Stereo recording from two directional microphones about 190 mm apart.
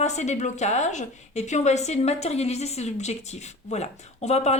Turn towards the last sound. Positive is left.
turn(degrees=35)  # may be behind; listen again after turning